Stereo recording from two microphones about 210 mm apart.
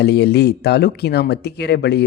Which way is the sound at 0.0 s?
50° left (ahead or behind).